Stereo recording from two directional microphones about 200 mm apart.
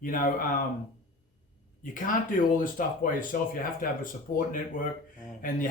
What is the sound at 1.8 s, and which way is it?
Speech, 45° left (ahead or behind).